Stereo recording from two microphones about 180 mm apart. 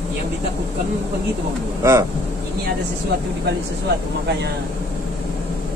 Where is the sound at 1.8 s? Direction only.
15° right (ahead or behind).